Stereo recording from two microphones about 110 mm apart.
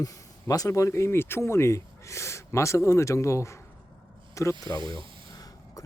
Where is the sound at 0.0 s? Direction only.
30° left (ahead or behind).